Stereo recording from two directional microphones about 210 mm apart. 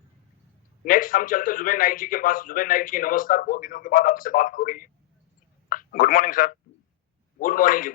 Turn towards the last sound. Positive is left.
turn(degrees=40)  # may be behind; listen again after turning